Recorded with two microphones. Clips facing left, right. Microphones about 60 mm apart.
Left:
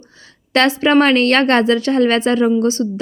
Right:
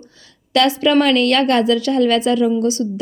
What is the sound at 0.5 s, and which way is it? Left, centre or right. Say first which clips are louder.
A woman's voice: left 1 dB; left.